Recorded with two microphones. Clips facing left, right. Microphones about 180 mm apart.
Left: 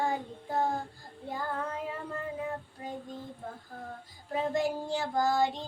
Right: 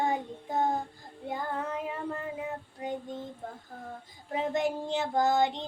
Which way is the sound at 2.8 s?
20° right (ahead or behind).